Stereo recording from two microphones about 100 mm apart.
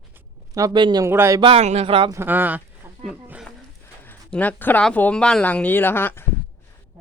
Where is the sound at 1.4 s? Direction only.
80° right; by 2.1 s 65° right (ahead or behind).